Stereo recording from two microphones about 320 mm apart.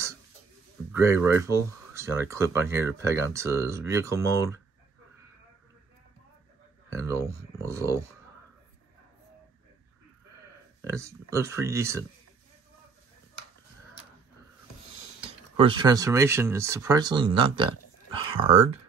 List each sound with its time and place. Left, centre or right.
0.9 s speech: centre
6.9 s speech: centre
10.8 s speech: centre
15.5 s speech: centre